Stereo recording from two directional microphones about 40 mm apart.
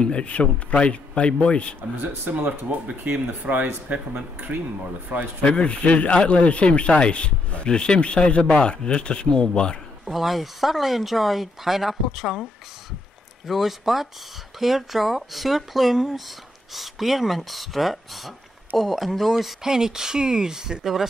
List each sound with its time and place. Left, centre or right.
0.0 s speech: left
2.3 s speech: right
4.1 s speech: right
5.4 s speech: left
10.0 s speech: centre
13.5 s speech: centre